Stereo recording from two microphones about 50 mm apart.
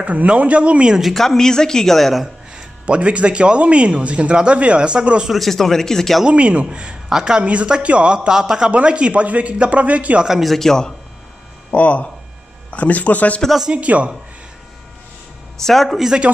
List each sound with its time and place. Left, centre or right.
0.0 s a man's voice: right
1.0 s speech: centre
2.5 s a man's voice: right
5.3 s speech: centre
6.2 s a man's voice: right
7.1 s a woman's voice: centre; by 10.2 s right
10.2 s a woman's voice: centre
10.5 s speech: centre
11.7 s speech: left
13.7 s a man's voice: right
15.6 s speech: centre